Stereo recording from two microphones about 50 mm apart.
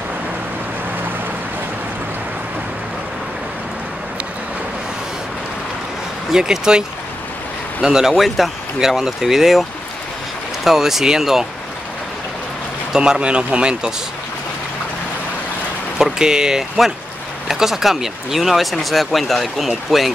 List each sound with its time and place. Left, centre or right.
6.3 s speech: centre
7.8 s speech: centre
12.9 s speech: centre
13.2 s speech: right
16.0 s speech: centre